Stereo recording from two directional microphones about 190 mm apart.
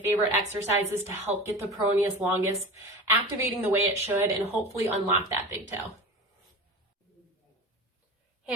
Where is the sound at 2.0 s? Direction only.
10° right (ahead or behind).